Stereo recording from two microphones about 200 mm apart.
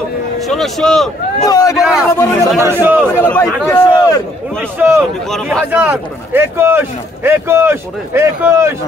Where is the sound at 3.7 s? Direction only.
15° left (ahead or behind).